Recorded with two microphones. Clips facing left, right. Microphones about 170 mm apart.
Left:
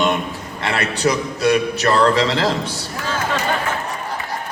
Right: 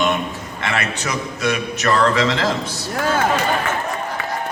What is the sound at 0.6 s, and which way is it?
A man's voice, 35° left (ahead or behind).